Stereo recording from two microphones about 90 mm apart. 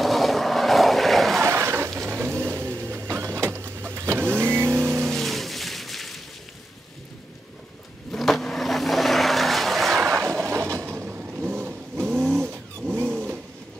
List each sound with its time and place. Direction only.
0.0 s vehicle: centre (ahead or behind)
1.4 s a sound: 30° right (ahead or behind)
2.0 s printer: 25° right (ahead or behind)
4.7 s vehicle: 20° right (ahead or behind)
5.1 s a sound: centre (ahead or behind)
8.1 s vehicle: centre (ahead or behind)
9.9 s vehicle: 25° right (ahead or behind)